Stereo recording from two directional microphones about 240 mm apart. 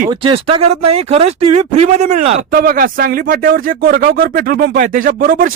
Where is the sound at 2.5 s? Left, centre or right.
Right.